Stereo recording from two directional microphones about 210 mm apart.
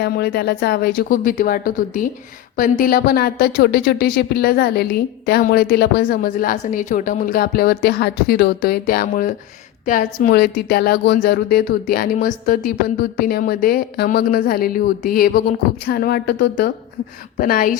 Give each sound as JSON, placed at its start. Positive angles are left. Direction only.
{"t": 0.0, "sound": "a woman's voice", "side_deg": 50}